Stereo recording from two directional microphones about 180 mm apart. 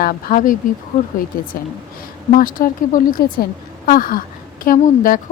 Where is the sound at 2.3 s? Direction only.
50° left (ahead or behind).